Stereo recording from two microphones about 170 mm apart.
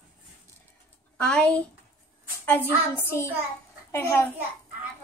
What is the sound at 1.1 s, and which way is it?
Speech, 5° left (ahead or behind).